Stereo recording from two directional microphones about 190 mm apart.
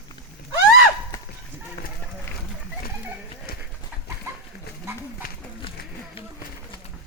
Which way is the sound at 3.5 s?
55° left (ahead or behind).